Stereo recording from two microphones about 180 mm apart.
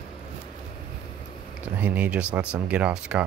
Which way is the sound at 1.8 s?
10° right (ahead or behind).